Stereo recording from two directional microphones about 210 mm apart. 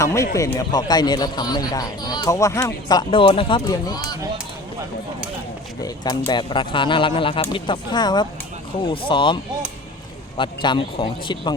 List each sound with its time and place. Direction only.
0.0 s speech: 15° left (ahead or behind)
5.8 s speech: 20° left (ahead or behind)